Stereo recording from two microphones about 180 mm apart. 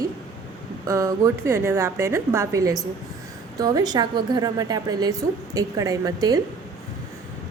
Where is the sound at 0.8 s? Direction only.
15° right (ahead or behind).